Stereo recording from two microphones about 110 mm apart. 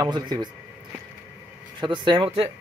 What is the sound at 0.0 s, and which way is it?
Speech, 40° right (ahead or behind).